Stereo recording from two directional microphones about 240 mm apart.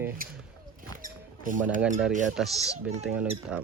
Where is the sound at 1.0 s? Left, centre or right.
Right.